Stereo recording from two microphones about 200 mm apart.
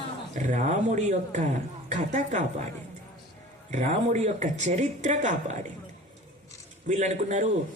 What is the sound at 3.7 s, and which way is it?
A man's voice, 35° right (ahead or behind).